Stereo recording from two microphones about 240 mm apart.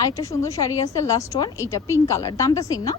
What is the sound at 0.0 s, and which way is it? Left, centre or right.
A woman's voice, centre.